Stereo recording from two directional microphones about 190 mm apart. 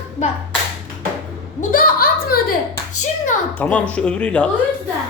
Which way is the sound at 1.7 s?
50° left (ahead or behind).